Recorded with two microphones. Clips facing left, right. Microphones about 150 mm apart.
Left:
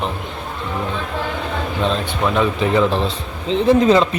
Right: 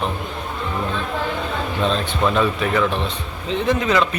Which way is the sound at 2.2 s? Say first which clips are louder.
Left 1 dB; 15° left (ahead or behind).